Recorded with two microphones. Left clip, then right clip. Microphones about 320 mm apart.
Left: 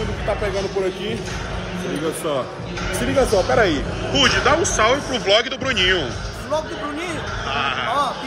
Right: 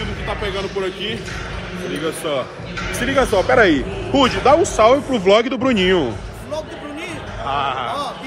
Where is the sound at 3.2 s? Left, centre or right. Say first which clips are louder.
Right 3 dB; right.